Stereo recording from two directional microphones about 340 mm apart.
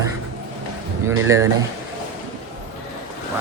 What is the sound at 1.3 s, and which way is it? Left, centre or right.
Speech, centre.